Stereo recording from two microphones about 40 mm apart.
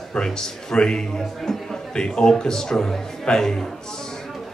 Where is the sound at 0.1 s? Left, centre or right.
Centre.